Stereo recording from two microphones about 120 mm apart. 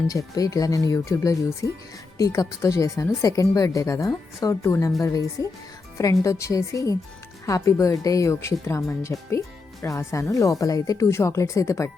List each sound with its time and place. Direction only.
0.1 s speech: 30° left (ahead or behind)